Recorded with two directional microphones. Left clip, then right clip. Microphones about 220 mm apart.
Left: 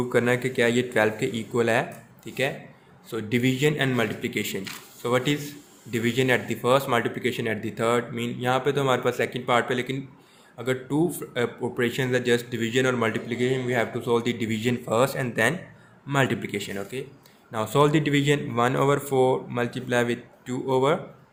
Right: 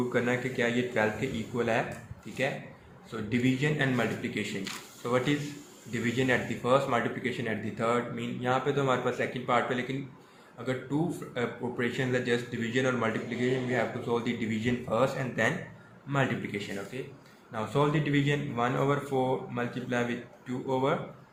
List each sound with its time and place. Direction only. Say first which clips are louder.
0.1 s speech: left 6 dB; 55° left (ahead or behind)
11.3 s speech: left 6 dB; 50° left (ahead or behind)